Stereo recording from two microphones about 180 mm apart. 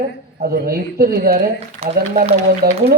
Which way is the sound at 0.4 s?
55° right (ahead or behind).